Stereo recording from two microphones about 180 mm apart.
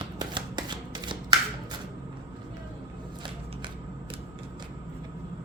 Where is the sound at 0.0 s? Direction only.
25° right (ahead or behind).